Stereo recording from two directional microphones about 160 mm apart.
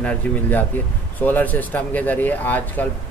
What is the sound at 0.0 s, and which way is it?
A man's voice, 10° left (ahead or behind).